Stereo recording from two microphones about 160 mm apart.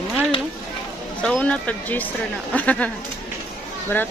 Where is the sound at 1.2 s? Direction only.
5° left (ahead or behind).